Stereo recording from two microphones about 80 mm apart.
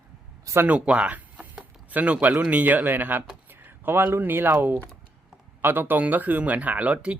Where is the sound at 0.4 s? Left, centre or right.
Right.